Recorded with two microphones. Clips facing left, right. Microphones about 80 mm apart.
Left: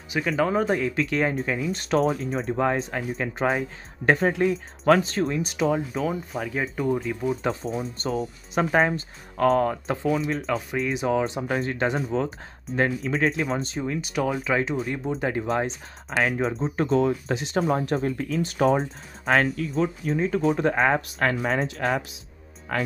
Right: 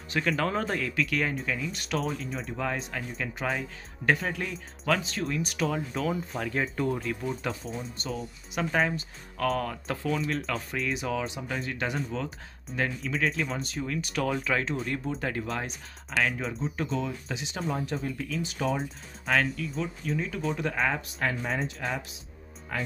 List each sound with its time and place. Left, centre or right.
0.4 s speech: centre; by 5.3 s left
5.3 s speech: left
5.9 s speech: centre
7.4 s speech: left
10.0 s speech: centre
10.9 s speech: left
15.4 s speech: left
21.2 s speech: left
22.7 s speech: left